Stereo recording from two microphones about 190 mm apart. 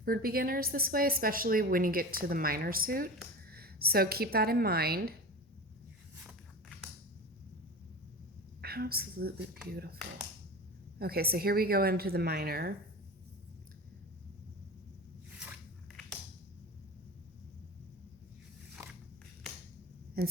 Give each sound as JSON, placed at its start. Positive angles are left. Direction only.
{"t": 0.0, "sound": "a woman's voice", "side_deg": -50}
{"t": 6.2, "sound": "walk", "side_deg": 0}
{"t": 8.6, "sound": "a woman's voice", "side_deg": -55}
{"t": 11.0, "sound": "a woman's voice", "side_deg": -55}
{"t": 18.8, "sound": "biting", "side_deg": -15}
{"t": 20.2, "sound": "speech", "side_deg": -50}